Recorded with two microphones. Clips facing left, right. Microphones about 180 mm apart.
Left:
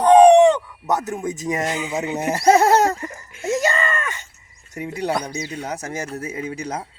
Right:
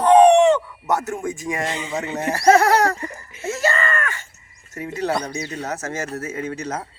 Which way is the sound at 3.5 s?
15° left (ahead or behind).